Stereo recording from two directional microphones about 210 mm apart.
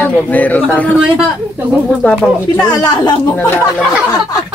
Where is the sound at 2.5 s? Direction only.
15° left (ahead or behind).